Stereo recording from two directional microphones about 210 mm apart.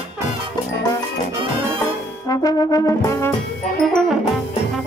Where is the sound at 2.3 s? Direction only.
15° left (ahead or behind).